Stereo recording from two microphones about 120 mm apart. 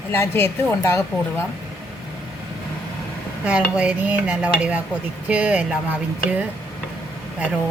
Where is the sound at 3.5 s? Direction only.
10° right (ahead or behind).